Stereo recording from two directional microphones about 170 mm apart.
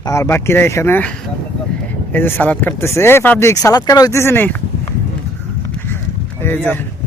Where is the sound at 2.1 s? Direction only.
10° left (ahead or behind).